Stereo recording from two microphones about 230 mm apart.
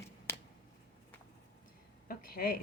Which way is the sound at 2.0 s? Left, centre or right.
Left.